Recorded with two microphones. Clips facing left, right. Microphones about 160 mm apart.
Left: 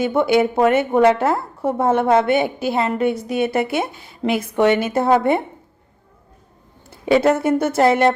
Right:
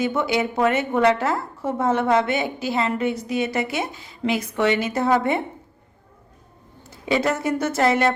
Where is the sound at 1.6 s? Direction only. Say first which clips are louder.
Left 4 dB; 55° left (ahead or behind).